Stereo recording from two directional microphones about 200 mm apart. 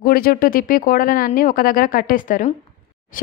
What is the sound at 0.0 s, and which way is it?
Speech, 45° left (ahead or behind).